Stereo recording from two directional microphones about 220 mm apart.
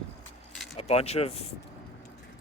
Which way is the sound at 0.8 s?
30° left (ahead or behind).